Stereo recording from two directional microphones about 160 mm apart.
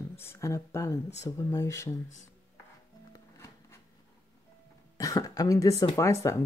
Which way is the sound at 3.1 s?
15° left (ahead or behind).